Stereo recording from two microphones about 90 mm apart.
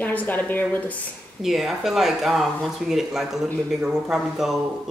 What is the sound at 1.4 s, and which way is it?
Speech, 5° right (ahead or behind).